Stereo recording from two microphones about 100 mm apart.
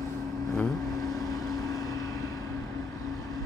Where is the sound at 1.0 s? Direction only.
35° left (ahead or behind).